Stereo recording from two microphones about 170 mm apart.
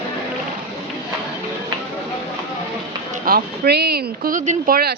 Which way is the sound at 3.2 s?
65° right (ahead or behind).